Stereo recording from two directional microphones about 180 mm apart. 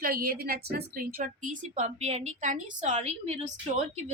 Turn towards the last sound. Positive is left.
turn(degrees=-35)  # may be behind; listen again after turning